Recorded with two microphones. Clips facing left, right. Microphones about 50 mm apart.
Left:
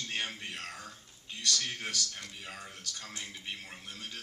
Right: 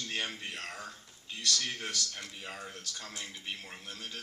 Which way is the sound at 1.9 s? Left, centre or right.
Centre.